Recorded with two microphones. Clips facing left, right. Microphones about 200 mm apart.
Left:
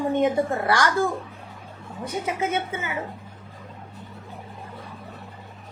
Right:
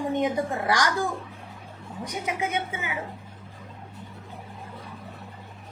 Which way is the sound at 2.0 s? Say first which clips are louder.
Left 3 dB; 15° right (ahead or behind).